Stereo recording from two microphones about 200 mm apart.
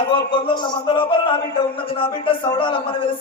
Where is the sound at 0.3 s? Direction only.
25° left (ahead or behind).